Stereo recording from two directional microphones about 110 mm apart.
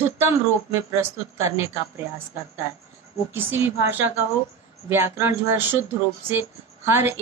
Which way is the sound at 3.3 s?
20° right (ahead or behind).